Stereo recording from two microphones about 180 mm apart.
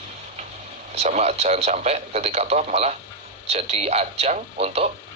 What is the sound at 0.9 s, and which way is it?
Speech, 35° right (ahead or behind).